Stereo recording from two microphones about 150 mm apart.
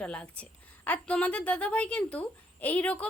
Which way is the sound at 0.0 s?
10° left (ahead or behind).